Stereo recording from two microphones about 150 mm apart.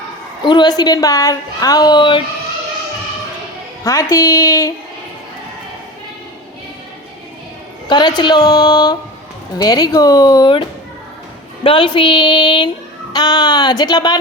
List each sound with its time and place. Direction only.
0.4 s a woman's voice: 30° left (ahead or behind)
3.8 s a woman's voice: 20° left (ahead or behind)
7.9 s a woman's voice: 30° left (ahead or behind)